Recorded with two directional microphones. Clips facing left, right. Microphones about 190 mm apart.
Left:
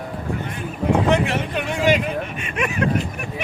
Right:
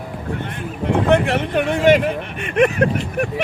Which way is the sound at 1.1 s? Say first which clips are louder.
Right 4 dB; 60° right (ahead or behind).